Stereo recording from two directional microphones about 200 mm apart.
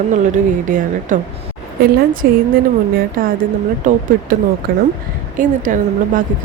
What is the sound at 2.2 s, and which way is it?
Speech, 45° right (ahead or behind).